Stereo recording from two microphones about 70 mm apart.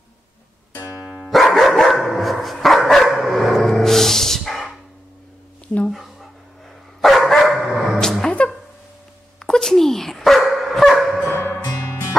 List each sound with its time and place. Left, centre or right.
1.2 s dog: centre
7.0 s dog: centre
8.0 s a sound: centre
9.5 s dog: centre
11.2 s music: left